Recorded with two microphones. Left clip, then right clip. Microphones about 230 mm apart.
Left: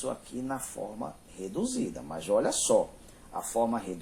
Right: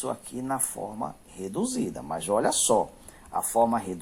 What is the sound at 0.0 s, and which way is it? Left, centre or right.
Speech, right.